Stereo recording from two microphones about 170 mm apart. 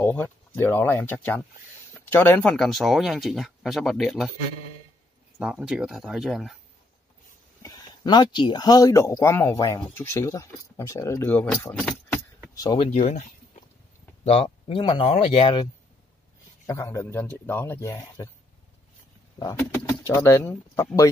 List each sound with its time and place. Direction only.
0.0 s speech: 10° left (ahead or behind)
5.4 s speech: 5° right (ahead or behind)
7.6 s speech: 25° left (ahead or behind)
12.5 s speech: 20° left (ahead or behind)
12.9 s speech: 45° left (ahead or behind)
16.6 s speech: 15° left (ahead or behind)
19.3 s speech: 20° left (ahead or behind)